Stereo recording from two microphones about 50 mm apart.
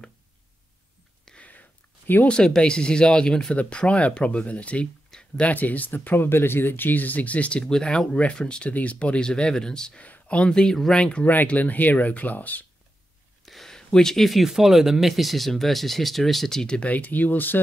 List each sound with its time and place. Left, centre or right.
1.4 s a sound: left
2.2 s speech: centre
9.9 s speech: left
11.4 s speech: left
13.5 s a sound: centre
13.7 s speech: centre
14.5 s speech: centre
16.6 s speech: centre
16.9 s speech: left